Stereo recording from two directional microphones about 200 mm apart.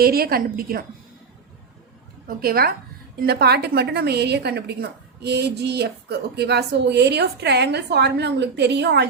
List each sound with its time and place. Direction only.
0.0 s a woman's voice: 50° right (ahead or behind)
2.2 s a woman's voice: 50° right (ahead or behind)